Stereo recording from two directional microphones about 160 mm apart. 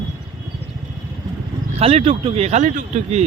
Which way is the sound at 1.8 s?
40° right (ahead or behind).